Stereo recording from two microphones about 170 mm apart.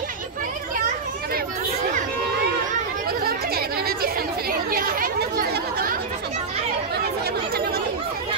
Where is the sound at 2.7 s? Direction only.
60° right (ahead or behind).